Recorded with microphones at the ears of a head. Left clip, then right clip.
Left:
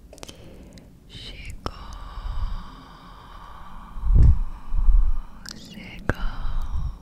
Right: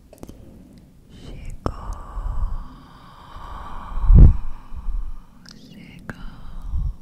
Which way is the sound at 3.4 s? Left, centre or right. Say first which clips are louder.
Right 7 dB; right.